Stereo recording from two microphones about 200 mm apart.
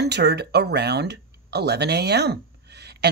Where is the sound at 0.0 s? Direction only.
55° right (ahead or behind).